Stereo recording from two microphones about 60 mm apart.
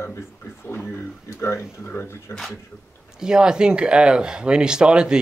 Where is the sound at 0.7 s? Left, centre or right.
Left.